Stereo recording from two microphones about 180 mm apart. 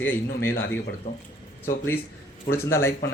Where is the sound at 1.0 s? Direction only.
40° left (ahead or behind).